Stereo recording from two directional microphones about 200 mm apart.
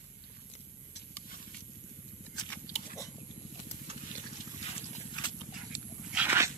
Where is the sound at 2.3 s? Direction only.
20° left (ahead or behind).